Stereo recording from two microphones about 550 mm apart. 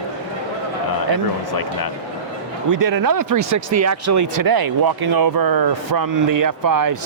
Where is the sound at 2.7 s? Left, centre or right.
Right.